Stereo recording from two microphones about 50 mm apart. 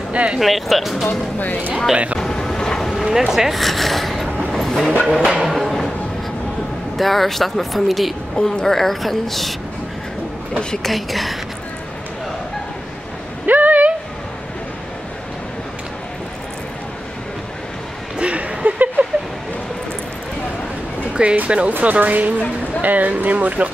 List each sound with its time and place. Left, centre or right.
0.1 s speech: right
0.4 s a woman's voice: centre
2.1 s vehicle: centre
3.0 s speech: centre
4.5 s vehicle: centre
5.0 s a woman's voice: centre
5.6 s a sound: centre
7.0 s a woman's voice: centre
10.8 s a woman's voice: centre
13.5 s a sound: right
18.1 s a sound: right
21.1 s music: right
21.4 s speech: right